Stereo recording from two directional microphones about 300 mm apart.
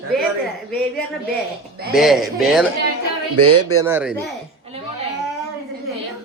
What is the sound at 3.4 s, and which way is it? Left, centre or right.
Speech, right.